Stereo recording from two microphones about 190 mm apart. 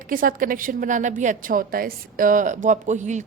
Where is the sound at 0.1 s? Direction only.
45° right (ahead or behind).